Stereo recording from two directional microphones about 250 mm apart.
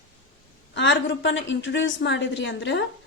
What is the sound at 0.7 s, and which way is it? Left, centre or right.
A woman's voice, left.